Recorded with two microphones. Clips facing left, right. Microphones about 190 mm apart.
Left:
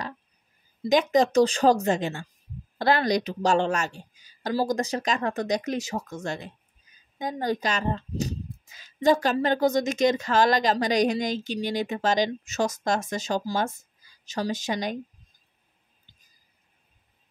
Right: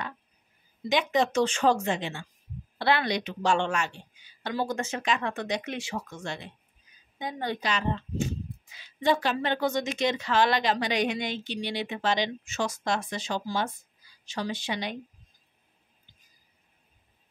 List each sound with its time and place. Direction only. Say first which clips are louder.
0.8 s a woman's voice: left 5 dB; 40° left (ahead or behind)